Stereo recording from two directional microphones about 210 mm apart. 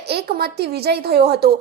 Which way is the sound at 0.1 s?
50° right (ahead or behind).